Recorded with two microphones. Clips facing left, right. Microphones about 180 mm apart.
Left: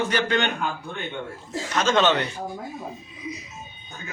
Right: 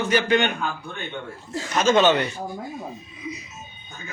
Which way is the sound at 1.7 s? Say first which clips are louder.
Right 3 dB; 10° right (ahead or behind).